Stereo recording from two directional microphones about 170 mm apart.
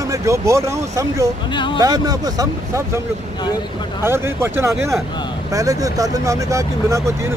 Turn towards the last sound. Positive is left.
turn(degrees=-20)  # may be behind; listen again after turning